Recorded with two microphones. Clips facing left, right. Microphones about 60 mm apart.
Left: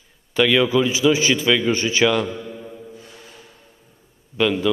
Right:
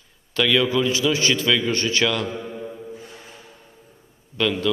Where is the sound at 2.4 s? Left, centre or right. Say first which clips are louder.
Right 2 dB; centre.